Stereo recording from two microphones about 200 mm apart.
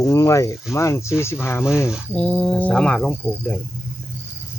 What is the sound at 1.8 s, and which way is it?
Speech, centre (ahead or behind).